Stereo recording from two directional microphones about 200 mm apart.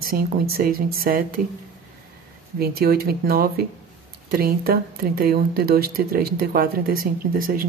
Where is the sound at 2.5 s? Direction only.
50° right (ahead or behind).